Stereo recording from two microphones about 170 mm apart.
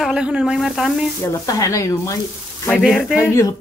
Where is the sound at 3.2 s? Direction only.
15° left (ahead or behind).